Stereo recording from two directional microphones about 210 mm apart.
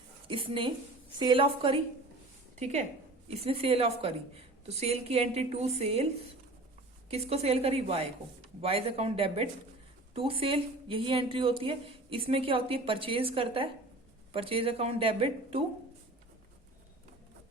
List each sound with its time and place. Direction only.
0.3 s a woman's voice: 25° right (ahead or behind)
3.2 s a woman's voice: 25° right (ahead or behind)
7.1 s a woman's voice: 30° right (ahead or behind)